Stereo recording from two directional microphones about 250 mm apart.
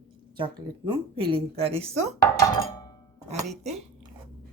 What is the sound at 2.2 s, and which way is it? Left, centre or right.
Speech, centre.